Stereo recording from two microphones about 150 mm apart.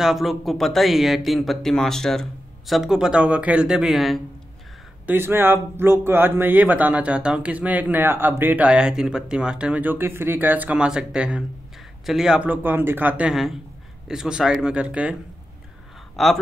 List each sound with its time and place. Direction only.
0.0 s speech: centre (ahead or behind)
5.0 s speech: 15° right (ahead or behind)
16.2 s speech: centre (ahead or behind)